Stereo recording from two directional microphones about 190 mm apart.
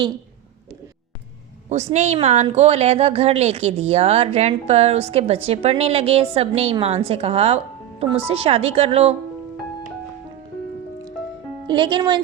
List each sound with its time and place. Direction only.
1.7 s a woman's voice: 35° right (ahead or behind)
11.7 s speech: 25° right (ahead or behind)